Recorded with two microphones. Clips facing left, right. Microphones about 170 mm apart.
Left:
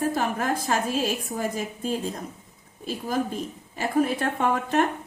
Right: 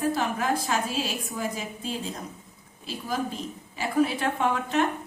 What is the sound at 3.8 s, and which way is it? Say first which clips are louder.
A woman's voice: left 1 dB; 50° left (ahead or behind).